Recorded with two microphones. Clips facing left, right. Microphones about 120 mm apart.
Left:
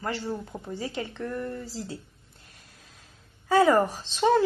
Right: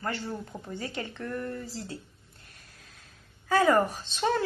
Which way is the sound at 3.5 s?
15° left (ahead or behind).